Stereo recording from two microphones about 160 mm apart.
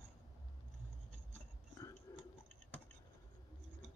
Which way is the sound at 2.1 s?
15° left (ahead or behind).